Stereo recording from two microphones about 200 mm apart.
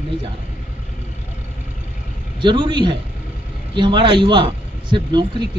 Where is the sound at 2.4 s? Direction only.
25° right (ahead or behind).